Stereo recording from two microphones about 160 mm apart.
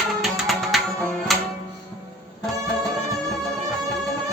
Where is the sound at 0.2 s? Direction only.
Centre (ahead or behind).